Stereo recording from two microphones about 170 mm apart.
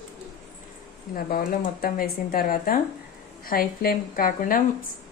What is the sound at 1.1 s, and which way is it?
Speech, 60° left (ahead or behind).